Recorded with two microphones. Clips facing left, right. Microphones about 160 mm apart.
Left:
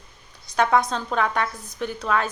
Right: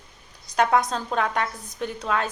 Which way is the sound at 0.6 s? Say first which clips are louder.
Left 1 dB; 5° right (ahead or behind).